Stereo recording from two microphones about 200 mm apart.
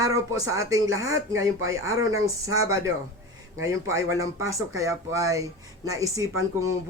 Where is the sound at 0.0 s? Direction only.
15° right (ahead or behind).